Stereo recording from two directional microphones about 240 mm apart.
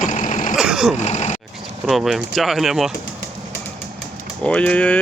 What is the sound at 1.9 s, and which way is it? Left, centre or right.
Speech, centre.